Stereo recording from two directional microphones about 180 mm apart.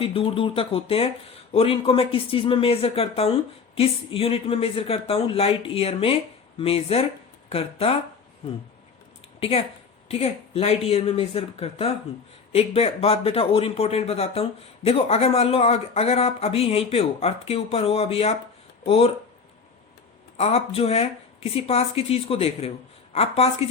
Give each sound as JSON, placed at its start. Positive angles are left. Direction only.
{"t": 0.0, "sound": "speech", "side_deg": 30}
{"t": 9.4, "sound": "speech", "side_deg": 30}
{"t": 20.3, "sound": "speech", "side_deg": 35}